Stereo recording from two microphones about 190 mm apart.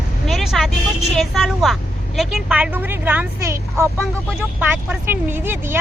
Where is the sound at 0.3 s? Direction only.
Centre (ahead or behind).